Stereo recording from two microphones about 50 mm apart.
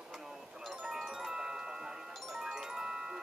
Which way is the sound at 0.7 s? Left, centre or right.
Centre.